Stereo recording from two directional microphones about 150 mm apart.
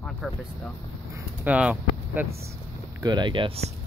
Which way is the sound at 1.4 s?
10° right (ahead or behind).